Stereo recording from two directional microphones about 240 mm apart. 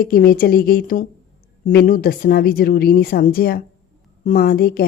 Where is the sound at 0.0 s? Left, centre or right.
Left.